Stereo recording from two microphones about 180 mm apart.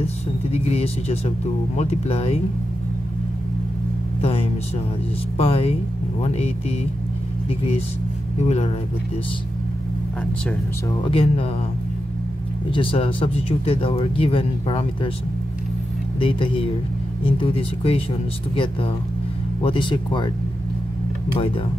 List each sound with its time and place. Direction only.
0.0 s speech: 35° left (ahead or behind)
4.2 s a sound: 30° left (ahead or behind)
5.4 s speech: 30° left (ahead or behind)
8.4 s speech: 35° left (ahead or behind)
11.0 s speech: 30° left (ahead or behind)
12.7 s speech: 30° left (ahead or behind)
16.2 s speech: 30° left (ahead or behind)